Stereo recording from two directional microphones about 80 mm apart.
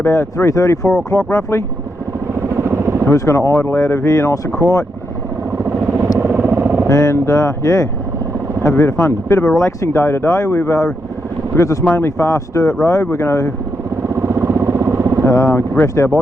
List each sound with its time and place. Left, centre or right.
0.0 s speech: left
2.6 s vehicle: right
3.1 s speech: left
6.1 s vehicle: right
6.8 s speech: left
14.1 s vehicle: right
15.2 s speech: left